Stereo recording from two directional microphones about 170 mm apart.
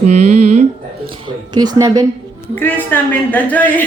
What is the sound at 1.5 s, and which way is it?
Speech, 25° right (ahead or behind).